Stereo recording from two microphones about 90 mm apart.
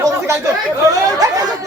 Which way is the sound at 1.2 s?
45° right (ahead or behind).